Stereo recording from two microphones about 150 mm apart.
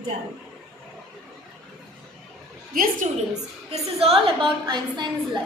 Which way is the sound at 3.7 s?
40° right (ahead or behind).